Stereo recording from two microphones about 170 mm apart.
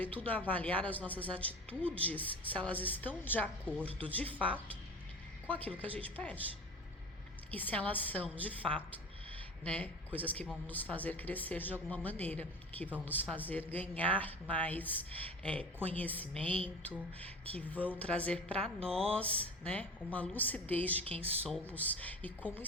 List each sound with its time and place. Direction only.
0.0 s a woman's voice: 10° left (ahead or behind)
3.8 s speech: 35° right (ahead or behind)
5.5 s a woman's voice: 10° left (ahead or behind)
7.5 s a woman's voice: 10° left (ahead or behind)